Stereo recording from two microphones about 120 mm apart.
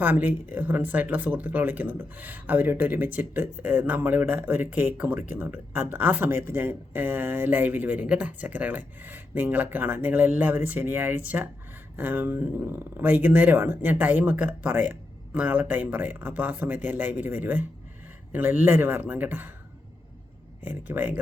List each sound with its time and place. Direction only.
0.0 s speech: 15° right (ahead or behind)
20.7 s speech: 15° right (ahead or behind)